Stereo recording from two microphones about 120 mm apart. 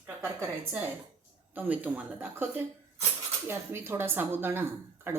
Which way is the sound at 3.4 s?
20° right (ahead or behind).